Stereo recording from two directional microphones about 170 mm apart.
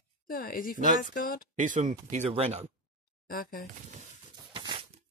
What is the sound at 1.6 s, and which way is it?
Speech, 50° right (ahead or behind).